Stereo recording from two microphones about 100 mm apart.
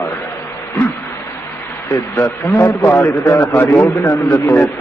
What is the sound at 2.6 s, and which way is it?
A man's voice, 25° left (ahead or behind).